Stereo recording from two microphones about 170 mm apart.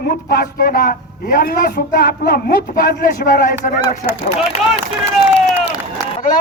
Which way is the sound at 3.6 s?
45° left (ahead or behind).